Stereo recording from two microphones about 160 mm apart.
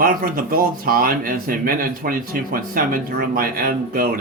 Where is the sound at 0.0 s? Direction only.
65° right (ahead or behind).